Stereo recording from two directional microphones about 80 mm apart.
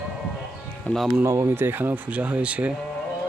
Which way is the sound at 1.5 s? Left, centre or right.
Right.